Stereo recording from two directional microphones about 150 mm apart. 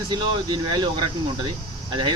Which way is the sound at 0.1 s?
30° right (ahead or behind).